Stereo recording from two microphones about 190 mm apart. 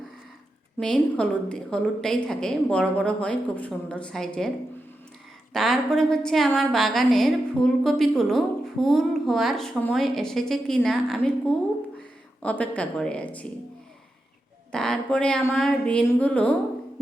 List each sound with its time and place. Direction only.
0.8 s a woman's voice: 5° left (ahead or behind)
5.5 s a woman's voice: centre (ahead or behind)
14.7 s a woman's voice: 5° left (ahead or behind)